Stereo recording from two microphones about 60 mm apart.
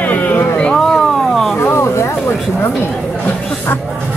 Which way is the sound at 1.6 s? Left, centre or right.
Left.